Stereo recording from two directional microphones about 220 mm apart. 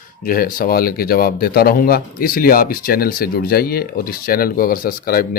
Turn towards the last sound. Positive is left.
turn(degrees=40)  # may be behind; listen again after turning